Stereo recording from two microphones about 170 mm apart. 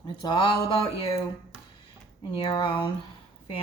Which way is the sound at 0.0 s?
25° left (ahead or behind).